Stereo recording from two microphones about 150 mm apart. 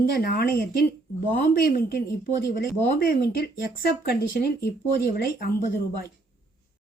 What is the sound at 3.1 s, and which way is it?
Speech, 80° left.